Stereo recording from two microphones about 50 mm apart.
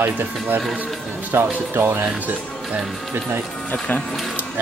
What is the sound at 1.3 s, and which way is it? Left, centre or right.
Speech, right.